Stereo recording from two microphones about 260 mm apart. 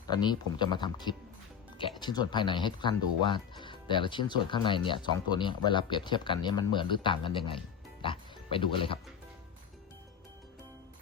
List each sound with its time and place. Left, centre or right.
0.1 s speech: centre
8.0 s music: centre